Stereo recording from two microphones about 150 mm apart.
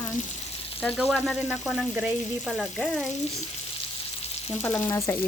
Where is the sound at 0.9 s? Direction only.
Centre (ahead or behind).